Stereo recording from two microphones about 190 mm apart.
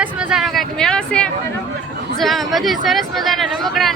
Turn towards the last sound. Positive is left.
turn(degrees=0)  # may be behind; listen again after turning